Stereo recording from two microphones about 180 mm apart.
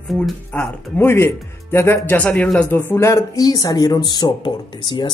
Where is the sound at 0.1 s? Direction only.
5° left (ahead or behind).